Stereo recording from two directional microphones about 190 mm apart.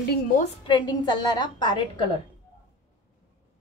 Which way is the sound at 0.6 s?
25° left (ahead or behind).